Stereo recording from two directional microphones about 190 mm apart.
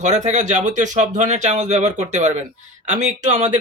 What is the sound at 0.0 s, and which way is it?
Speech, 40° right (ahead or behind).